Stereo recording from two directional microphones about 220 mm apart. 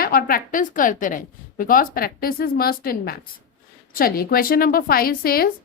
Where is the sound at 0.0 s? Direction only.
40° left (ahead or behind).